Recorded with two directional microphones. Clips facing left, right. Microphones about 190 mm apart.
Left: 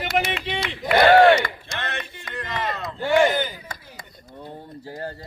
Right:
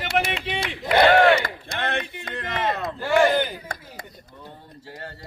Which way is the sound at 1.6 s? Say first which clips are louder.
Right 4 dB; 55° right (ahead or behind).